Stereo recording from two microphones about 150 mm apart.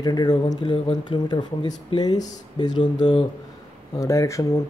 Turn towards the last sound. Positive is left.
turn(degrees=20)  # may be behind; listen again after turning